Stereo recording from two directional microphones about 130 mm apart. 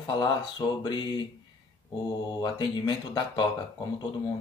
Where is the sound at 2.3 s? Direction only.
35° left (ahead or behind).